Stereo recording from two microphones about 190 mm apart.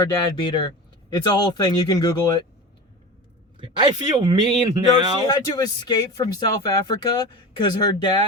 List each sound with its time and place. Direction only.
0.0 s speech: 20° left (ahead or behind)
3.6 s speech: 25° right (ahead or behind)
5.3 s speech: 20° left (ahead or behind)